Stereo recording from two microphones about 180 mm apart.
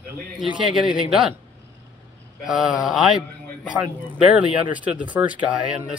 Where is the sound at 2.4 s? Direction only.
5° right (ahead or behind).